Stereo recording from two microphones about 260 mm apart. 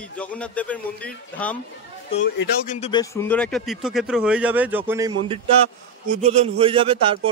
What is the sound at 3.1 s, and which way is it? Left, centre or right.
A man's voice, centre.